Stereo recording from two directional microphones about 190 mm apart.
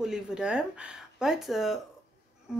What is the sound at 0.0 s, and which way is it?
Speech, 5° right (ahead or behind).